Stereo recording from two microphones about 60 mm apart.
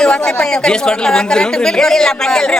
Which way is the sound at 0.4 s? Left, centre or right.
Centre.